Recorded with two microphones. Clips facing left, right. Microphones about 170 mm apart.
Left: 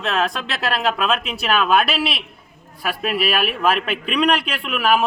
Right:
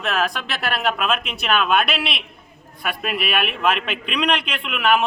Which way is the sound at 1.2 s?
Centre (ahead or behind).